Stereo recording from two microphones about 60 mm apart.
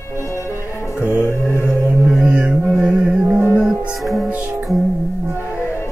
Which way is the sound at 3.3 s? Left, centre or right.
Right.